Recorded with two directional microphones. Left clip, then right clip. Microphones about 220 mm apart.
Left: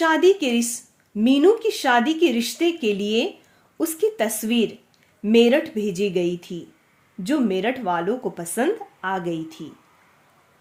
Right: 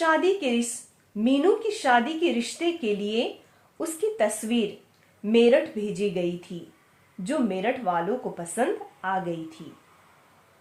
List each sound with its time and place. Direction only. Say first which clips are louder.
0.0 s speech: left 5 dB; 45° left (ahead or behind)